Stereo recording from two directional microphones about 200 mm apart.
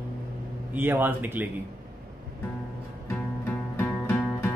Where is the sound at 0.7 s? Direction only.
10° right (ahead or behind).